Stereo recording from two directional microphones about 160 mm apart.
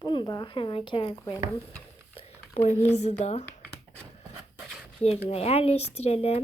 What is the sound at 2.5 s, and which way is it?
Speech, 45° left (ahead or behind).